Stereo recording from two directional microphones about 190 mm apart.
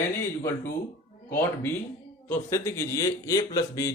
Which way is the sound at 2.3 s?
15° left (ahead or behind).